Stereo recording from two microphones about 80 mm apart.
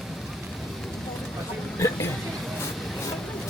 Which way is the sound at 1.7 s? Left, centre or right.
Left.